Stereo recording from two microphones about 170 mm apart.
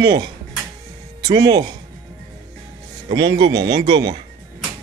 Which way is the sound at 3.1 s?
25° right (ahead or behind).